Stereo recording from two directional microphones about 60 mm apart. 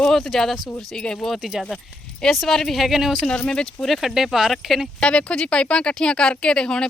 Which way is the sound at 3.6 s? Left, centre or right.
Centre.